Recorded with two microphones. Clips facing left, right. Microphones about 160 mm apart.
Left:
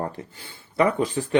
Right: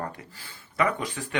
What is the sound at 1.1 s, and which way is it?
Speech, 35° left (ahead or behind).